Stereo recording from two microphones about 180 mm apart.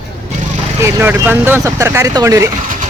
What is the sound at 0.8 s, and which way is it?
Speech, 10° right (ahead or behind).